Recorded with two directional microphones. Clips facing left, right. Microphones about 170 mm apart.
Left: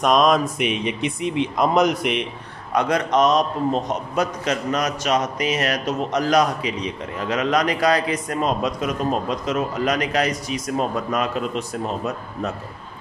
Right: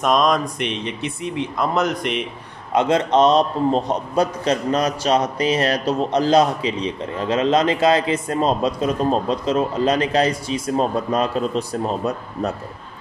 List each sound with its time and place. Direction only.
0.0 s speech: centre (ahead or behind)
2.7 s a man's voice: 25° right (ahead or behind)